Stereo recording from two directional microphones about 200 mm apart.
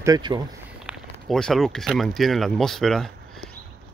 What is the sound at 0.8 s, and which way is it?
Speech, centre (ahead or behind).